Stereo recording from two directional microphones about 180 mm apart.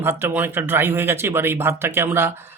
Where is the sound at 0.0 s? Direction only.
15° right (ahead or behind).